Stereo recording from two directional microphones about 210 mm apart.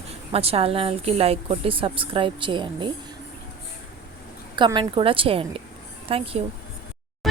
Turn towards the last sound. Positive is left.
turn(degrees=0)  # may be behind; listen again after turning